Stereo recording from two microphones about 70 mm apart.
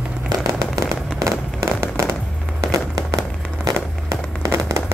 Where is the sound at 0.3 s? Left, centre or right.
Right.